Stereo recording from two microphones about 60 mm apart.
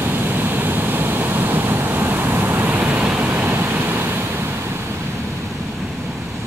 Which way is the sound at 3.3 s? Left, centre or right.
Right.